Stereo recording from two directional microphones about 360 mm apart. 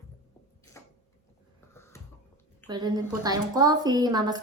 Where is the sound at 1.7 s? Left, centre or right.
Centre.